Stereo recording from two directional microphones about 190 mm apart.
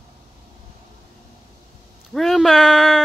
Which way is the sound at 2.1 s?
Centre (ahead or behind).